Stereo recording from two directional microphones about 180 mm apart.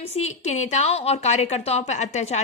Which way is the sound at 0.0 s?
35° left (ahead or behind).